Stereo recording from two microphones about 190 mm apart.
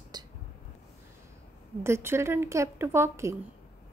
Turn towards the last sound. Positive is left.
turn(degrees=-15)  # may be behind; listen again after turning